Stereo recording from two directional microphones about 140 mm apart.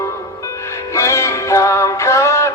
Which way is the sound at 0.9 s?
20° left (ahead or behind).